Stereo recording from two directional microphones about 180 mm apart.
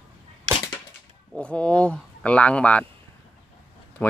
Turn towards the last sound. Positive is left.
turn(degrees=10)  # may be behind; listen again after turning